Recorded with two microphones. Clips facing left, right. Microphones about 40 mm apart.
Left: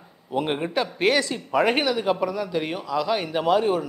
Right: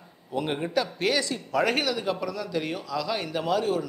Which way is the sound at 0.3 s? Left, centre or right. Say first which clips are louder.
Left 3 dB; left.